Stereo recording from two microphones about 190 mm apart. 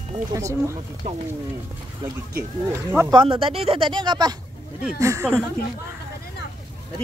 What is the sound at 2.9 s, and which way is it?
Speech, 15° right (ahead or behind).